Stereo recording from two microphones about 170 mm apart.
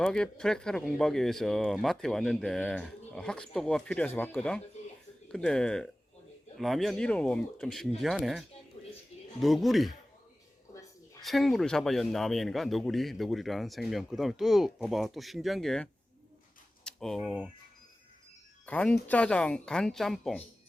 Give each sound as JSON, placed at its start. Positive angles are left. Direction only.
{"t": 0.0, "sound": "speech", "side_deg": 5}
{"t": 8.7, "sound": "a sound", "side_deg": 35}
{"t": 9.4, "sound": "speech", "side_deg": 0}
{"t": 11.2, "sound": "speech", "side_deg": 0}
{"t": 18.6, "sound": "speech", "side_deg": 10}